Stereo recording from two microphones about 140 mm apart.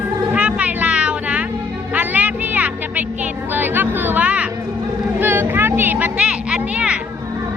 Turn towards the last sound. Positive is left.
turn(degrees=-5)  # may be behind; listen again after turning